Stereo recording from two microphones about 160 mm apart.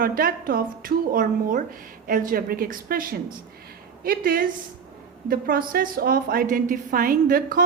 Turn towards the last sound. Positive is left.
turn(degrees=-60)  # may be behind; listen again after turning